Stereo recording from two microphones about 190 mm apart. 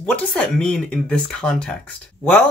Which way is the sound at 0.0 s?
5° left (ahead or behind).